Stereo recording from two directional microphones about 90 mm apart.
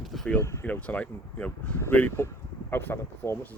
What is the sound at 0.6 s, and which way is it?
Speech, 15° left (ahead or behind).